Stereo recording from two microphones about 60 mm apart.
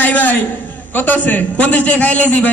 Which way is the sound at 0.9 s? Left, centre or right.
Left.